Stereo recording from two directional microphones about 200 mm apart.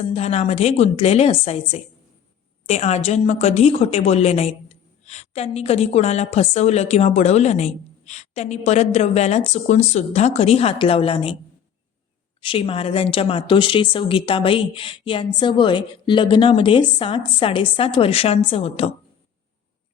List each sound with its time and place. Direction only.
0.0 s a woman's voice: 30° left (ahead or behind)
12.4 s speech: 25° left (ahead or behind)